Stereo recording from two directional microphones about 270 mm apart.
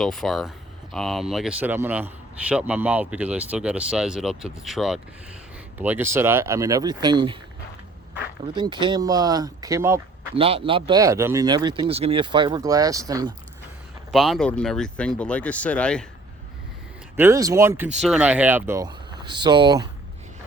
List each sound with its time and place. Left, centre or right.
0.0 s a man's voice: centre
8.5 s speech: centre
14.1 s a man's voice: centre
17.2 s speech: centre